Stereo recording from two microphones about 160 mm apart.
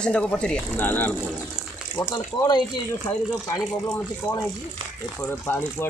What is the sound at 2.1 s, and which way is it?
Speech, 25° left (ahead or behind).